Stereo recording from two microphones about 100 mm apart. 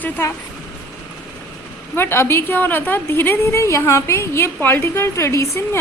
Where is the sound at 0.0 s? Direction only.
25° left (ahead or behind).